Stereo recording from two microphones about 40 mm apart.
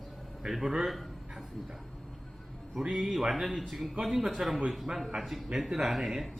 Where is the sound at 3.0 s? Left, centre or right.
Centre.